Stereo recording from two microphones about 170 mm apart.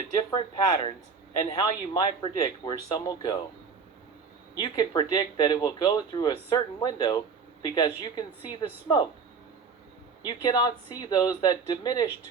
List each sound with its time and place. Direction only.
0.3 s speech: 25° left (ahead or behind)
4.5 s speech: 25° left (ahead or behind)
10.2 s speech: 25° left (ahead or behind)